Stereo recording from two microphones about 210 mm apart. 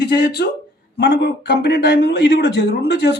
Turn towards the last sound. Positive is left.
turn(degrees=55)  # may be behind; listen again after turning